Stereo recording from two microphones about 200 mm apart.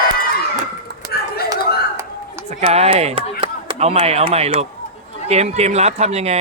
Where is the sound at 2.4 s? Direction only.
30° right (ahead or behind).